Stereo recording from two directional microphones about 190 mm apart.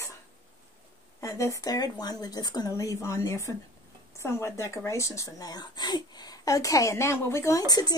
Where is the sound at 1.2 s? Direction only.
15° left (ahead or behind).